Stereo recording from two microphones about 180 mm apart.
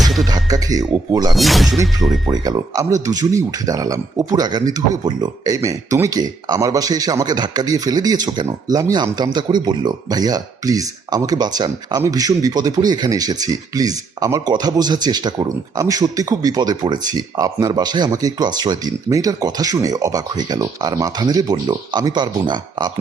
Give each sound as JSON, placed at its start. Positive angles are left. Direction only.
{"t": 0.0, "sound": "music", "side_deg": 0}
{"t": 0.3, "sound": "speech", "side_deg": -20}
{"t": 1.4, "sound": "speech", "side_deg": 0}
{"t": 2.2, "sound": "speech", "side_deg": -20}